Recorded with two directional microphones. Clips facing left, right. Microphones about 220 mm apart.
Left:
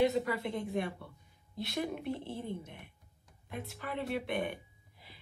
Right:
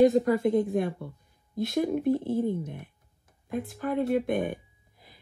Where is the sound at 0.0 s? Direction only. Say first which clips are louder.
Right 9 dB; 45° right (ahead or behind).